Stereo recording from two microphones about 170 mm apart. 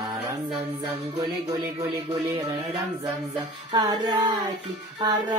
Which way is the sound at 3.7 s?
25° right (ahead or behind).